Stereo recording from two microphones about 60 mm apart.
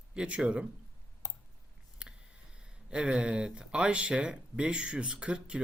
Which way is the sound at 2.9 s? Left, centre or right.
Centre.